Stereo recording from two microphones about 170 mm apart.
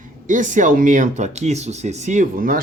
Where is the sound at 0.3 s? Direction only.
50° right (ahead or behind).